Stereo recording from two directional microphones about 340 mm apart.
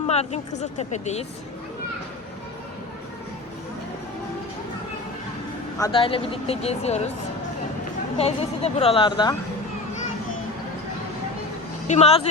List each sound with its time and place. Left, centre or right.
0.1 s a sound: centre
0.5 s speech: centre
5.8 s speech: centre
8.2 s speech: centre
11.9 s speech: centre